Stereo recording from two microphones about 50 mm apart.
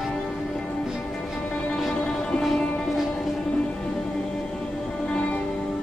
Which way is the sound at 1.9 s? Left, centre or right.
Centre.